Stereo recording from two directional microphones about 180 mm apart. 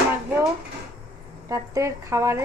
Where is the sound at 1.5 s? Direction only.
15° right (ahead or behind).